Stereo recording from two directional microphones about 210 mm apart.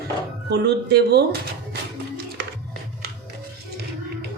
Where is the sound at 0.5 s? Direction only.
50° right (ahead or behind).